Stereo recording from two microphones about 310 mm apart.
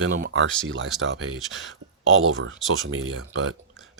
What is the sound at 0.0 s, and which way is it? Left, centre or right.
Speech, right.